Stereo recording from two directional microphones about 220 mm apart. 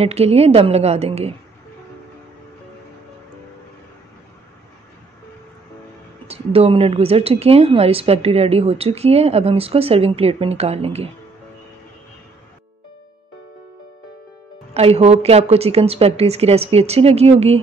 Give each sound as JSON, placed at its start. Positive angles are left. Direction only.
{"t": 0.0, "sound": "a woman's voice", "side_deg": -30}
{"t": 6.2, "sound": "a woman's voice", "side_deg": -25}
{"t": 14.7, "sound": "a woman's voice", "side_deg": -25}